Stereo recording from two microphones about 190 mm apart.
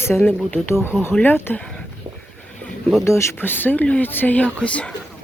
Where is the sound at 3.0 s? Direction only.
15° left (ahead or behind).